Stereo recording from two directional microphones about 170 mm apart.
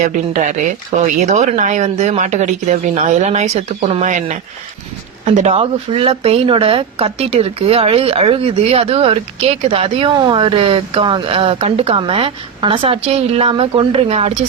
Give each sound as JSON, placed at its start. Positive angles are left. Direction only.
{"t": 0.0, "sound": "speech", "side_deg": -45}